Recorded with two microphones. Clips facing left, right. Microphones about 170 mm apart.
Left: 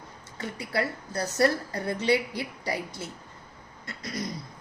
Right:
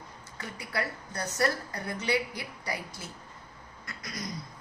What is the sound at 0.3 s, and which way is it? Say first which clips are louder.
A woman's voice: left 5 dB; 25° left (ahead or behind).